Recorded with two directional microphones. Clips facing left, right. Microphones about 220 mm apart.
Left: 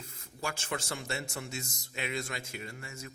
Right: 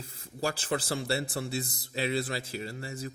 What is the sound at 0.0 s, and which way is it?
Speech, 35° right (ahead or behind).